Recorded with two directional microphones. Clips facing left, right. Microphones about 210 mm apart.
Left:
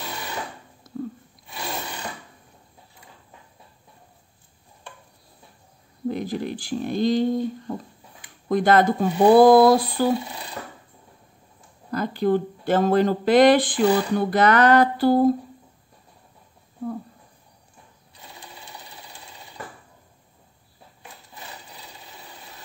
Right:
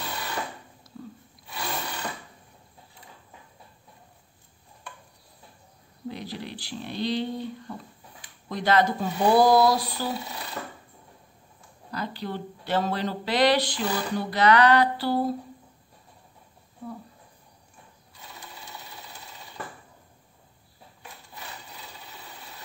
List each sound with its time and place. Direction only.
0.8 s a sound: 50° left (ahead or behind)
6.0 s speech: 50° left (ahead or behind)
11.9 s speech: 50° left (ahead or behind)